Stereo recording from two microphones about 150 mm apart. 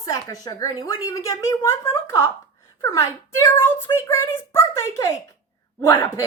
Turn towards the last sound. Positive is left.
turn(degrees=15)  # may be behind; listen again after turning